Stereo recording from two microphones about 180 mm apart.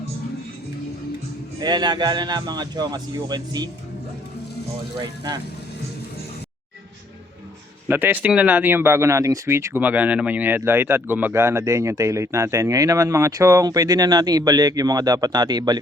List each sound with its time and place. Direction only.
1.6 s a man's voice: 25° right (ahead or behind)
7.9 s speech: 10° right (ahead or behind)